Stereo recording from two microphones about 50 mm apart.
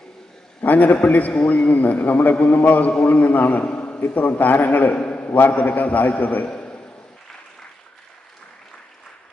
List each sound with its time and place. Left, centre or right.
0.6 s a man's voice: left